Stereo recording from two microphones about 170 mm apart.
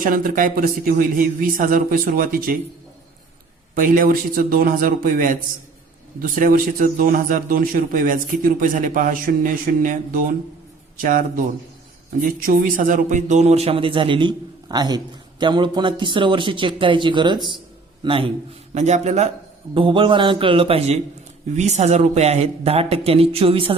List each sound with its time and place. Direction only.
0.0 s speech: 55° right (ahead or behind)
3.8 s a man's voice: 55° right (ahead or behind); by 18.3 s 30° right (ahead or behind)
18.7 s speech: 40° right (ahead or behind)
19.7 s speech: 30° right (ahead or behind)